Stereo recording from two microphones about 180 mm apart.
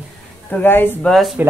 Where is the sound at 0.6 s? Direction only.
10° left (ahead or behind).